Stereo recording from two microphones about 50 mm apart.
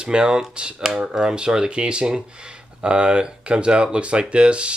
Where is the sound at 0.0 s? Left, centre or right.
Centre.